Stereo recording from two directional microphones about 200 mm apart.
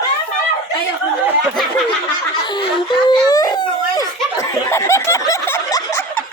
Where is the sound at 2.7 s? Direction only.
20° left (ahead or behind).